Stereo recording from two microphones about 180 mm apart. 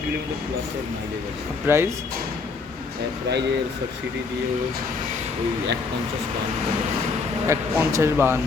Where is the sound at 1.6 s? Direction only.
15° right (ahead or behind).